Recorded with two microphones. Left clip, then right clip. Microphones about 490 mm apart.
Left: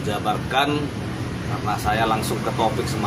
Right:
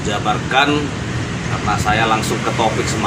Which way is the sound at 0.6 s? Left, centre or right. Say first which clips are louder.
Right 6 dB; left.